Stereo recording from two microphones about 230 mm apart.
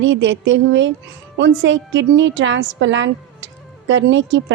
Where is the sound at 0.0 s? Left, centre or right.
Right.